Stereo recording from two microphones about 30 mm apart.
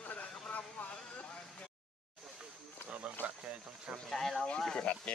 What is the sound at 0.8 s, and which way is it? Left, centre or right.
Vehicle, left.